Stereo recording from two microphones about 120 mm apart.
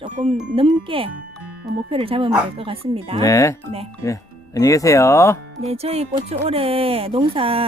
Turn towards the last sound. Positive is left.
turn(degrees=-50)  # may be behind; listen again after turning